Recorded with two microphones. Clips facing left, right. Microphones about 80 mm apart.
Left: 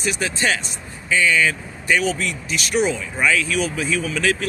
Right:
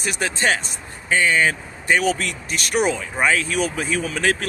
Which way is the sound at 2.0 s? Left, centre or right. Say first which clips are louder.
Right 1 dB; right.